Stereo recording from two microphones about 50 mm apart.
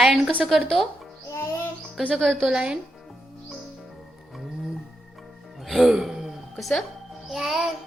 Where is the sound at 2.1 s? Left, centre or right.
Centre.